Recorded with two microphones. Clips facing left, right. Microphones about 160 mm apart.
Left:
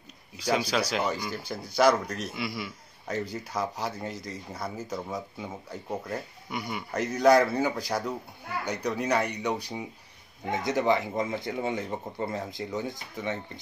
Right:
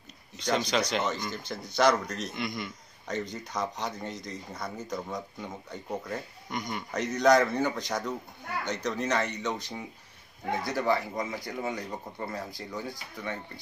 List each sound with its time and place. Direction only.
0.4 s speech: 5° left (ahead or behind)